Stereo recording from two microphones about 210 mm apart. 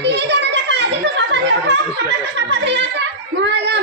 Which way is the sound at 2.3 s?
55° right (ahead or behind).